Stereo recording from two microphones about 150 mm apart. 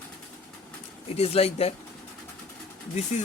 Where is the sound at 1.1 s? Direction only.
40° left (ahead or behind).